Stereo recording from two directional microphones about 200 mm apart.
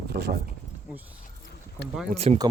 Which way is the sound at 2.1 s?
30° right (ahead or behind).